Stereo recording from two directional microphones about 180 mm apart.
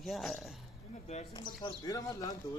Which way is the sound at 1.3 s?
25° left (ahead or behind).